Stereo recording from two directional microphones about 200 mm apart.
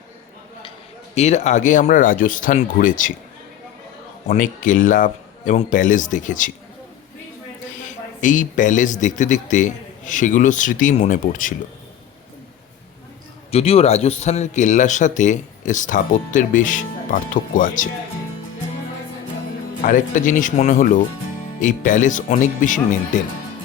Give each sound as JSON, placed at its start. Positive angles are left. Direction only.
{"t": 1.1, "sound": "speech", "side_deg": 35}
{"t": 4.3, "sound": "speech", "side_deg": 40}
{"t": 7.9, "sound": "speech", "side_deg": 40}
{"t": 13.5, "sound": "speech", "side_deg": 30}
{"t": 19.8, "sound": "speech", "side_deg": 40}